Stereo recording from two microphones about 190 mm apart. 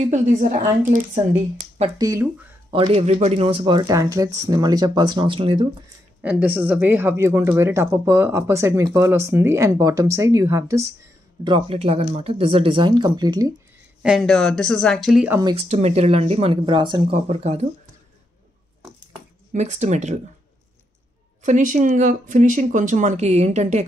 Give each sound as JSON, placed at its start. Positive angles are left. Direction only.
{"t": 0.0, "sound": "speech", "side_deg": -40}
{"t": 2.0, "sound": "speech", "side_deg": -20}
{"t": 2.7, "sound": "speech", "side_deg": -30}
{"t": 6.2, "sound": "speech", "side_deg": -10}
{"t": 11.4, "sound": "speech", "side_deg": -25}
{"t": 14.0, "sound": "speech", "side_deg": 0}
{"t": 15.7, "sound": "speech", "side_deg": -35}
{"t": 19.5, "sound": "speech", "side_deg": -35}
{"t": 21.4, "sound": "speech", "side_deg": -40}